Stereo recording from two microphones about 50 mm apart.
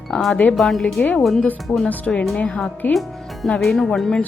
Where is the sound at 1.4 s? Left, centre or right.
Left.